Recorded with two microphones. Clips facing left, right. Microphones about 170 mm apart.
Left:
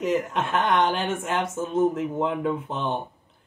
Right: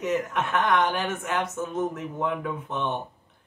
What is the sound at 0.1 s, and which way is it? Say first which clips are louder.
Speech: even; 25° left (ahead or behind).